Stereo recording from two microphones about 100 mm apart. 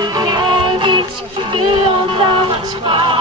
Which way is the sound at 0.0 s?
45° right (ahead or behind).